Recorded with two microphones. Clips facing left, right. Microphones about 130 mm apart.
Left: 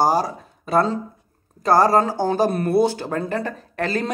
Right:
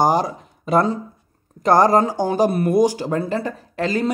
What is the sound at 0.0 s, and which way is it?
Speech, 20° right (ahead or behind).